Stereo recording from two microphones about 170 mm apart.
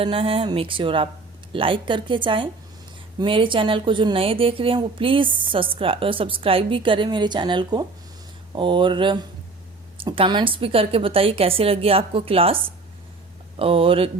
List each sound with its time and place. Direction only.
0.0 s a woman's voice: 30° right (ahead or behind)